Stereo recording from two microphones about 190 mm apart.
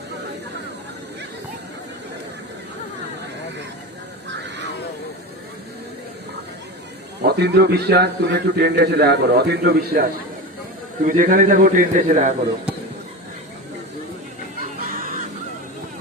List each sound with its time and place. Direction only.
7.2 s a man's voice: 60° right (ahead or behind); by 12.3 s 45° right (ahead or behind)
14.6 s music: 45° right (ahead or behind)